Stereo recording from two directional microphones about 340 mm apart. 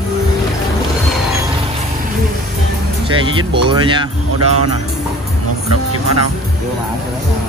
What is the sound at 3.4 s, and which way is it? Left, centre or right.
Speech, centre.